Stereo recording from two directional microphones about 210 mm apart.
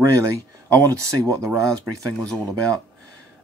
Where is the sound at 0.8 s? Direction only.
15° right (ahead or behind).